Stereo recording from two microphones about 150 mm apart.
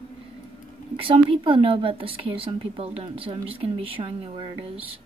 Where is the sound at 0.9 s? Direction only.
35° right (ahead or behind).